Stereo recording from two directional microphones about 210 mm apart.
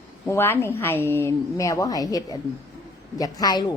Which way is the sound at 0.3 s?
10° left (ahead or behind).